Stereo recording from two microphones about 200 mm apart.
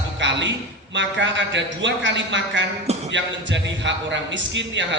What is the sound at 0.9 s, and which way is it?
A man's voice, 65° right (ahead or behind).